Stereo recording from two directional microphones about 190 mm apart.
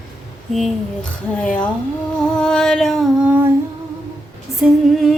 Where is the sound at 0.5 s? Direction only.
5° left (ahead or behind).